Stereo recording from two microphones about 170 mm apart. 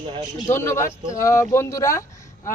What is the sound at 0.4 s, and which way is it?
Speech, 15° left (ahead or behind).